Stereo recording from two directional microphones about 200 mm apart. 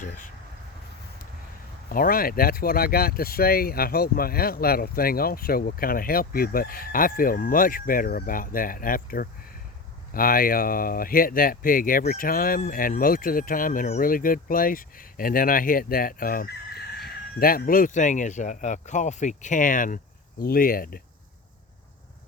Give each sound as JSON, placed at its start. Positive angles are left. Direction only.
{"t": 1.9, "sound": "speech", "side_deg": 45}